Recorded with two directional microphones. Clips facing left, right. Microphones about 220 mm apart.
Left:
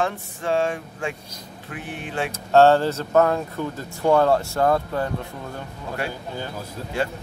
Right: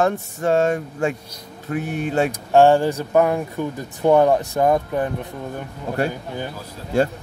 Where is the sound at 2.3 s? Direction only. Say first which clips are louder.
Even; 15° right (ahead or behind).